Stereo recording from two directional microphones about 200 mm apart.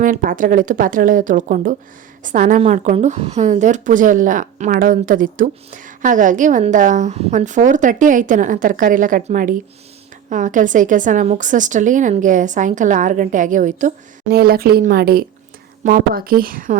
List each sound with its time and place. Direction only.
0.0 s a woman's voice: 45° right (ahead or behind)